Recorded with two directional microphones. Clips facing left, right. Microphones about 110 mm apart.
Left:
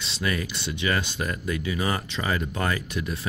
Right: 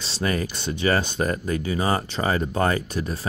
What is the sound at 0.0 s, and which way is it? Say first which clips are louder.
Speech: right 3 dB; 35° right (ahead or behind).